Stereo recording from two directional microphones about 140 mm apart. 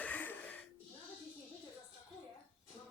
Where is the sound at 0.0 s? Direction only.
10° left (ahead or behind).